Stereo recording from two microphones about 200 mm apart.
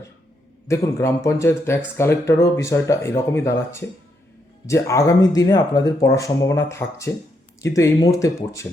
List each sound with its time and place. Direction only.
0.7 s speech: 15° left (ahead or behind)